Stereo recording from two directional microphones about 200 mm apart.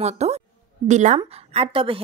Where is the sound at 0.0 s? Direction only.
35° right (ahead or behind).